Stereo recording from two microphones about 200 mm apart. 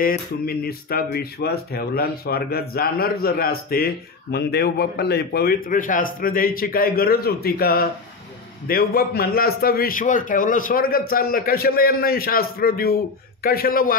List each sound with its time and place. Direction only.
0.0 s speech: 45° left (ahead or behind)